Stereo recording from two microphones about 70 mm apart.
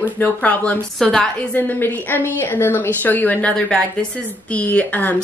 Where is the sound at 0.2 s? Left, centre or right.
Left.